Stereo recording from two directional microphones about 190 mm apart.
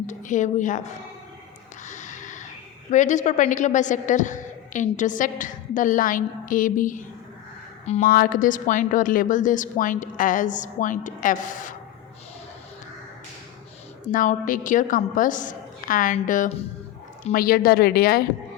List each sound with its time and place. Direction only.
0.0 s a woman's voice: 40° left (ahead or behind)
1.9 s a sound: 40° left (ahead or behind)
2.9 s a woman's voice: 40° left (ahead or behind)
8.1 s a woman's voice: 45° left (ahead or behind)
14.1 s a woman's voice: 45° left (ahead or behind)